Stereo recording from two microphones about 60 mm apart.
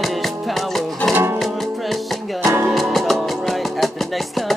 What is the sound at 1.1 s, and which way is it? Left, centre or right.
Music, right.